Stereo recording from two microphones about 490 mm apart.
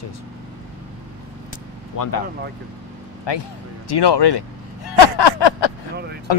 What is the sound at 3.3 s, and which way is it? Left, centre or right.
Speech, left.